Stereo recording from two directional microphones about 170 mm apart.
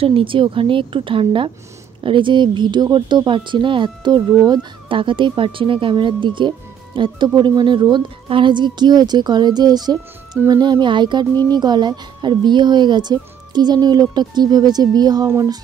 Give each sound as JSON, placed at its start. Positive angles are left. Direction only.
{"t": 0.0, "sound": "a woman's voice", "side_deg": -30}